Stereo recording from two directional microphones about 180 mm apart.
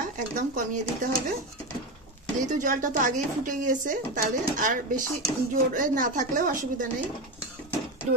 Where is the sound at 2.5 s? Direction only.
45° right (ahead or behind).